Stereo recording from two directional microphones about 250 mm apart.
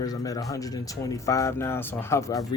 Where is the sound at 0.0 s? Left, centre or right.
Centre.